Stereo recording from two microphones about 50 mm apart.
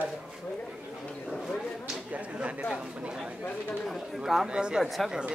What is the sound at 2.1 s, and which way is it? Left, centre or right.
Speech, right.